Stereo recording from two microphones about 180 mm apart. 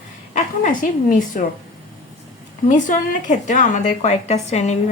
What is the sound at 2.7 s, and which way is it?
A woman's voice, 45° left (ahead or behind).